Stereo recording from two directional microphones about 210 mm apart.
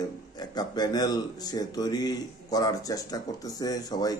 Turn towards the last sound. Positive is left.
turn(degrees=20)  # may be behind; listen again after turning